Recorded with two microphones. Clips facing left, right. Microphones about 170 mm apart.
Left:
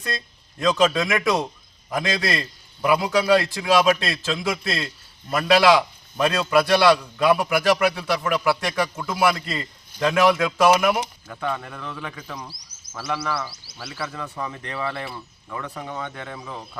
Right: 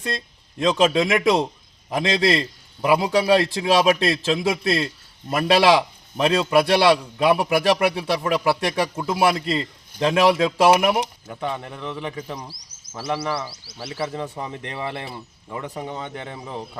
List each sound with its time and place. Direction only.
0.6 s a man's voice: 25° right (ahead or behind)